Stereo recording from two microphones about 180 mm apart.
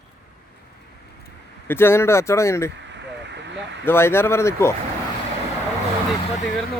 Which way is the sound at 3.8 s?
15° left (ahead or behind).